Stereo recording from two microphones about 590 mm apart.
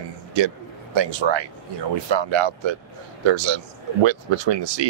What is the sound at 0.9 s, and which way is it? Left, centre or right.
Speech, right.